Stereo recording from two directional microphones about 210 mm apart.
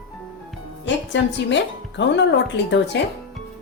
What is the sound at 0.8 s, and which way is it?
A woman's voice, 60° left (ahead or behind).